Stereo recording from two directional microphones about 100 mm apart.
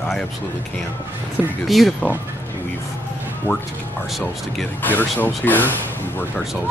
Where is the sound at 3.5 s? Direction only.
25° left (ahead or behind).